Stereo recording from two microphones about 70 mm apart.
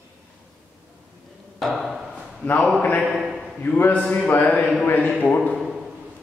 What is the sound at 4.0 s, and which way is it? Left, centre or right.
A man's voice, centre.